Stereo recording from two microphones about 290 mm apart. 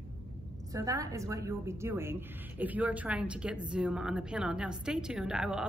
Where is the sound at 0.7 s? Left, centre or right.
Centre.